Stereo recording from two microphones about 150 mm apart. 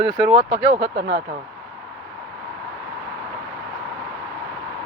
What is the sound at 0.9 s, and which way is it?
Speech, 80° right.